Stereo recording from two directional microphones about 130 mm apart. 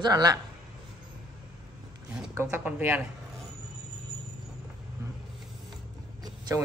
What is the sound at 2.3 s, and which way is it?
Speech, 20° right (ahead or behind).